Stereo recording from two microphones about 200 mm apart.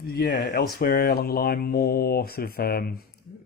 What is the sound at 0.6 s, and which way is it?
Speech, 50° left (ahead or behind).